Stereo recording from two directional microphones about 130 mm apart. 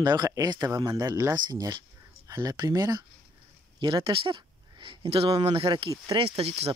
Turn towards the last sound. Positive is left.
turn(degrees=-50)  # may be behind; listen again after turning